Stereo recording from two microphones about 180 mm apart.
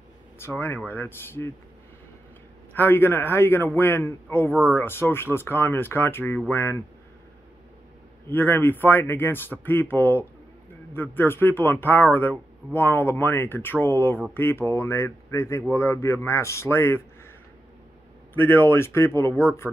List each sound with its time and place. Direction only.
0.4 s speech: 15° left (ahead or behind)
2.7 s speech: 10° left (ahead or behind)
4.5 s speech: 10° right (ahead or behind)
4.7 s speech: 15° left (ahead or behind)
8.3 s speech: 10° left (ahead or behind)
18.3 s speech: 10° left (ahead or behind)